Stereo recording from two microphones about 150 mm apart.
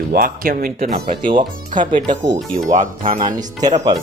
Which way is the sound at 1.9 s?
35° right (ahead or behind).